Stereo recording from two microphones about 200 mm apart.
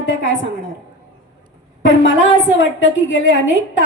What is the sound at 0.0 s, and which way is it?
Speech, 70° left (ahead or behind).